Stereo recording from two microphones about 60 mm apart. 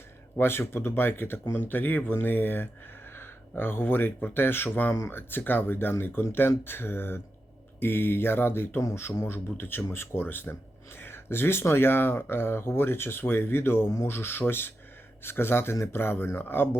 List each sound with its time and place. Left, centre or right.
0.3 s speech: left